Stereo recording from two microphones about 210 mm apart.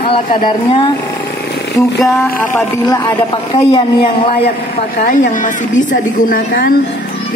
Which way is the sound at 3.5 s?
25° left (ahead or behind).